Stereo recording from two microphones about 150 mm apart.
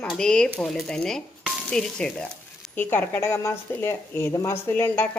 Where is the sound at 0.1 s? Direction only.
5° left (ahead or behind).